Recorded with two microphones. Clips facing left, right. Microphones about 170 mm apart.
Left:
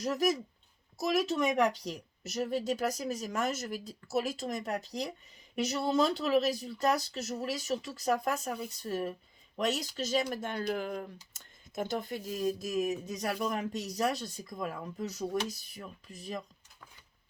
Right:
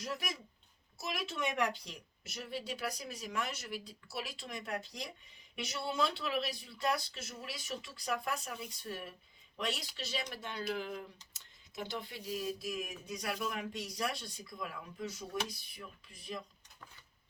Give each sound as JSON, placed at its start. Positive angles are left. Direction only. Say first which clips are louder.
{"t": 0.0, "sound": "speech", "louder": "left 12 dB", "side_deg": 40}